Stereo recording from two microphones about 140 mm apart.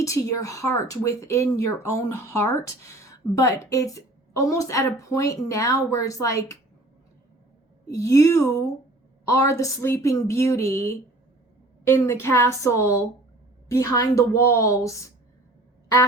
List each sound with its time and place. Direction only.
0.0 s speech: 25° left (ahead or behind)
7.9 s speech: 25° left (ahead or behind)